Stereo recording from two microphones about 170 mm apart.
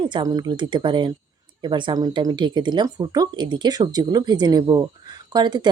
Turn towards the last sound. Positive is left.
turn(degrees=-25)  # may be behind; listen again after turning